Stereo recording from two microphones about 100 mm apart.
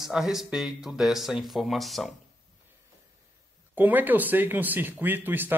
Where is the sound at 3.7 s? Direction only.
20° right (ahead or behind).